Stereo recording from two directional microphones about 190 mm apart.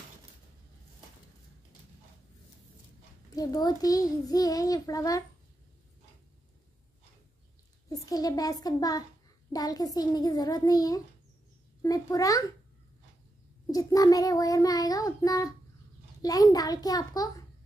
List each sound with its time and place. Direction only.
3.3 s a child's voice: 20° left (ahead or behind)
7.9 s a child's voice: 20° left (ahead or behind)
13.7 s a child's voice: 20° left (ahead or behind)